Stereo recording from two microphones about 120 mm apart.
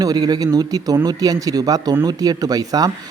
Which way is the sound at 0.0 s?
35° right (ahead or behind).